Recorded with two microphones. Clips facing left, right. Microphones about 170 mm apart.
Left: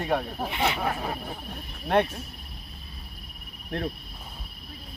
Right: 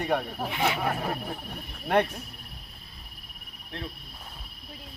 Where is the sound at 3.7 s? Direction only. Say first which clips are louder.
Left 8 dB; 50° left (ahead or behind).